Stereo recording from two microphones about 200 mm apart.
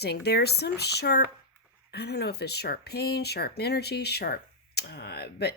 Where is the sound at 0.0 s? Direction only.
55° left (ahead or behind).